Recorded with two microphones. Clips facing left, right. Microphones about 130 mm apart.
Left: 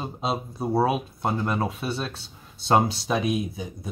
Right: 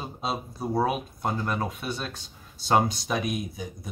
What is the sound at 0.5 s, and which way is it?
Speech, 25° left (ahead or behind).